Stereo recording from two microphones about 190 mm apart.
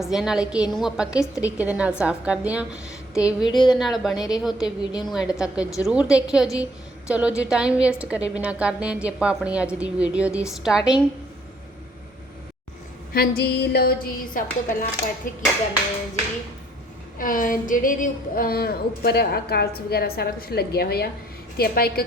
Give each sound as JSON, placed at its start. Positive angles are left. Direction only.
{"t": 0.0, "sound": "a woman's voice", "side_deg": 0}
{"t": 3.5, "sound": "a woman's voice", "side_deg": 20}
{"t": 3.8, "sound": "a woman's voice", "side_deg": 0}
{"t": 4.6, "sound": "a woman's voice", "side_deg": 20}
{"t": 5.0, "sound": "a woman's voice", "side_deg": -5}
{"t": 13.1, "sound": "speech", "side_deg": 55}
{"t": 17.2, "sound": "speech", "side_deg": 45}